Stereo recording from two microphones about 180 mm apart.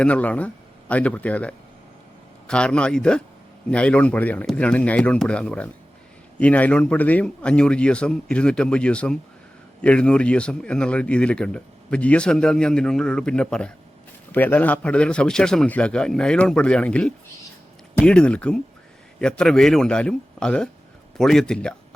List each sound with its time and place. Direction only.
0.0 s a man's voice: 5° left (ahead or behind)